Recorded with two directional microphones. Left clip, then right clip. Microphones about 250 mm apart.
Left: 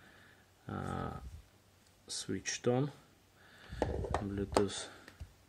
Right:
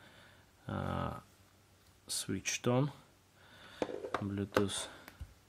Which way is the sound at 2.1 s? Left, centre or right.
Right.